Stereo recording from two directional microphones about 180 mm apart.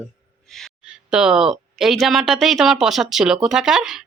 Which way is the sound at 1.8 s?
Centre (ahead or behind).